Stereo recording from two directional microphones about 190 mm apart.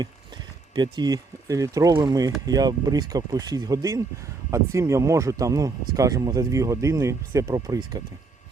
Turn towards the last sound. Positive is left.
turn(degrees=-20)  # may be behind; listen again after turning